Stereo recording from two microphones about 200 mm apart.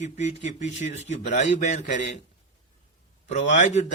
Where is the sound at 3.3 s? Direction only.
35° left (ahead or behind).